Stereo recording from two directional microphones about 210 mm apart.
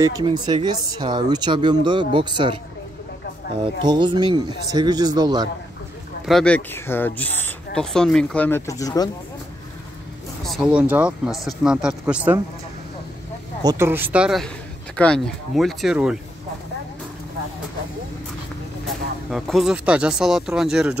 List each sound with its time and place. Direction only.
0.0 s speech: 20° right (ahead or behind)
3.8 s speech: 20° right (ahead or behind)
6.2 s speech: 5° left (ahead or behind)
10.4 s speech: centre (ahead or behind)
13.6 s speech: 15° right (ahead or behind)
19.3 s speech: centre (ahead or behind)